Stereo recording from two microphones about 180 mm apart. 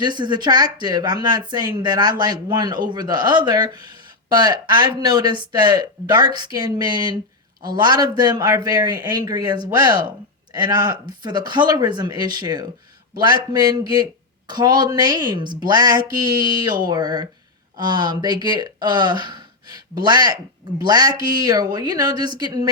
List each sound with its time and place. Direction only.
0.0 s speech: 25° right (ahead or behind)